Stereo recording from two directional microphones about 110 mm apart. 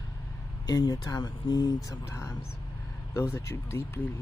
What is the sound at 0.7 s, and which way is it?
Speech, 35° left (ahead or behind).